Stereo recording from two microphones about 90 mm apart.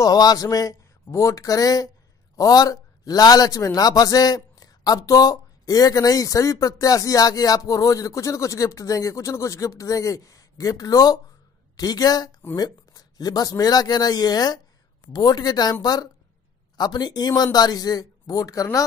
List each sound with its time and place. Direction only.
0.0 s a man's voice: 45° left (ahead or behind)